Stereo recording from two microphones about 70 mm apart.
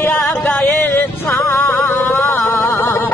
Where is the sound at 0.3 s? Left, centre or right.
Left.